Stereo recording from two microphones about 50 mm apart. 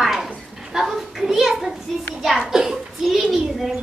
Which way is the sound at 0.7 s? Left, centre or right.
Centre.